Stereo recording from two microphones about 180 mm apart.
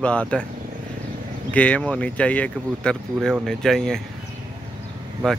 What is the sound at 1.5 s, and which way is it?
Speech, 5° left (ahead or behind).